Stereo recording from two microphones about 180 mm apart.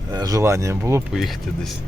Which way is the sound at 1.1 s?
Centre (ahead or behind).